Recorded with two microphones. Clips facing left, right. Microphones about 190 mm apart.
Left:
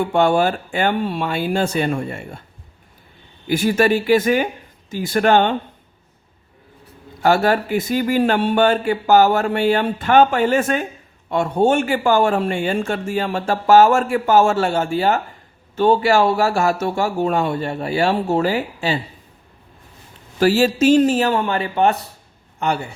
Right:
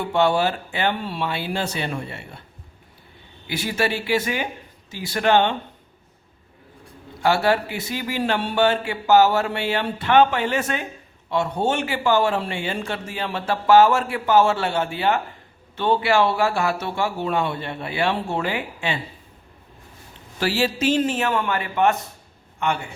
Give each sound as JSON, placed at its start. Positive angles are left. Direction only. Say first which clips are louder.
{"t": 0.0, "sound": "speech", "louder": "left 4 dB", "side_deg": 50}
{"t": 3.4, "sound": "speech", "louder": "left 8 dB", "side_deg": 50}
{"t": 7.2, "sound": "a man's voice", "louder": "left 3 dB", "side_deg": 45}
{"t": 20.4, "sound": "a man's voice", "louder": "left 7 dB", "side_deg": 45}